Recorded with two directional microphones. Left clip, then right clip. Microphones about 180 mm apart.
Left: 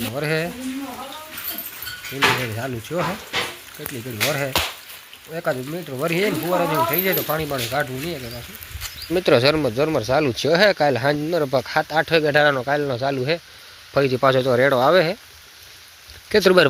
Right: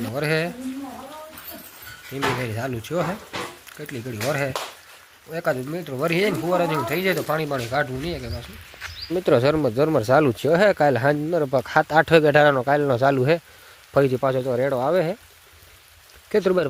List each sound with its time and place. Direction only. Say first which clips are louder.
0.1 s speech: right 1 dB; centre (ahead or behind)
2.4 s speech: left 1 dB; centre (ahead or behind)
9.1 s speech: left 2 dB; 15° right (ahead or behind)
9.7 s speech: right 1 dB; 30° right (ahead or behind)
13.0 s speech: right 3 dB; 35° right (ahead or behind)
13.9 s speech: even; 20° right (ahead or behind)
14.2 s speech: left 5 dB; 5° right (ahead or behind)
16.3 s speech: left 5 dB; 5° right (ahead or behind)